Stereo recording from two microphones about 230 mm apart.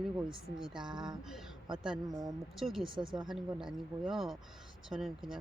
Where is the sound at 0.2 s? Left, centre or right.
Centre.